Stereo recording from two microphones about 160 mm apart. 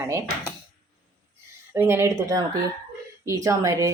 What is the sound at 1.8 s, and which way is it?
Speech, 15° right (ahead or behind).